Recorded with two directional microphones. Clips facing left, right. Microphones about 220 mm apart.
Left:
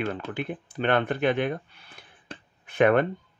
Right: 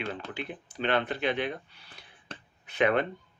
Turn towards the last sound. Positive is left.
turn(degrees=50)  # may be behind; listen again after turning